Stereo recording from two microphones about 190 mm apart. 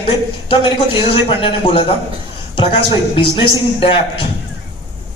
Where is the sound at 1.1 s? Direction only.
30° left (ahead or behind).